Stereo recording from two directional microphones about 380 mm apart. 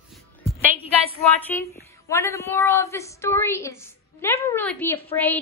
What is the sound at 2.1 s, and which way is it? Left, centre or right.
A woman's voice, centre.